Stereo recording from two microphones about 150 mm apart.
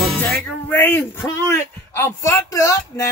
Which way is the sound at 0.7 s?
15° left (ahead or behind).